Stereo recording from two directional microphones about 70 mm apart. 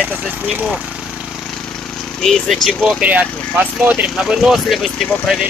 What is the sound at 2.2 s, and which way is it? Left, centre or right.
Speech, centre.